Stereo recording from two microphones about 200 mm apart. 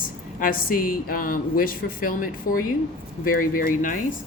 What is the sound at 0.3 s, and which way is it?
Speech, 45° left (ahead or behind).